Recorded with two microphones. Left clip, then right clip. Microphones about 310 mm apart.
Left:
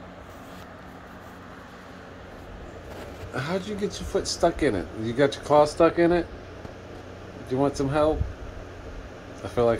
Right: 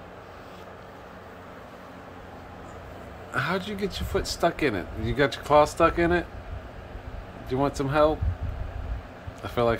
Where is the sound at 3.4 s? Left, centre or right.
Centre.